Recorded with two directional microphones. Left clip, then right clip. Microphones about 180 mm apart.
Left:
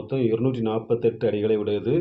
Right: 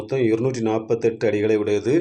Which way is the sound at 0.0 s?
30° right (ahead or behind).